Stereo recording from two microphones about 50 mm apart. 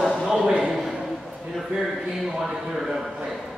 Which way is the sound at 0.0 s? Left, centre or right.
Centre.